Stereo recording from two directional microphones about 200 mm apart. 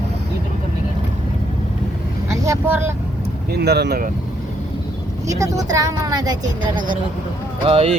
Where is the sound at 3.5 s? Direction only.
55° right (ahead or behind).